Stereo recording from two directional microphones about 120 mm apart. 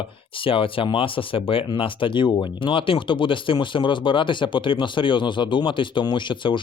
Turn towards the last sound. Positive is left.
turn(degrees=40)  # may be behind; listen again after turning